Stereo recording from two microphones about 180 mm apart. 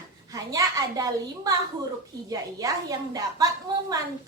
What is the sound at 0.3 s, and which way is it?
A woman's voice, 20° right (ahead or behind).